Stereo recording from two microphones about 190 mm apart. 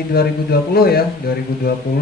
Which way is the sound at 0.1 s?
55° left (ahead or behind).